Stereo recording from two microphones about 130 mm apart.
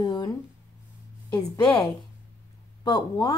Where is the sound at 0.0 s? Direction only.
30° left (ahead or behind).